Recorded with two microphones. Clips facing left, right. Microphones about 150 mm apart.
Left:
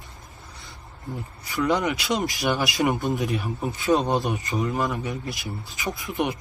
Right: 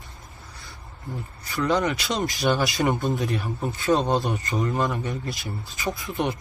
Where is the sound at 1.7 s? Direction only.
20° left (ahead or behind).